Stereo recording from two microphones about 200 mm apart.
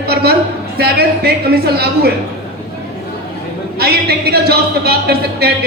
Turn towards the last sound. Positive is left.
turn(degrees=-50)  # may be behind; listen again after turning